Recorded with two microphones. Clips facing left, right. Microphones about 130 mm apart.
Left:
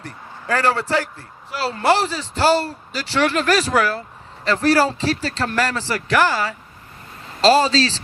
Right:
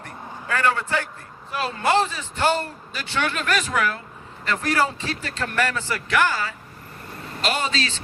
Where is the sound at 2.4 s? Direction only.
90° left.